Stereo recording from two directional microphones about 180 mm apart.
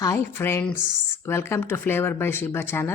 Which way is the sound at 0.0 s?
15° left (ahead or behind).